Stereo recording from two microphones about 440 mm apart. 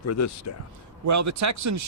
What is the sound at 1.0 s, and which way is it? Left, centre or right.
Speech, right.